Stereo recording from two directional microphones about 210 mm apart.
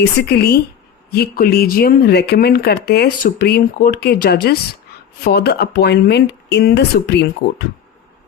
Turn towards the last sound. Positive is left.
turn(degrees=55)  # may be behind; listen again after turning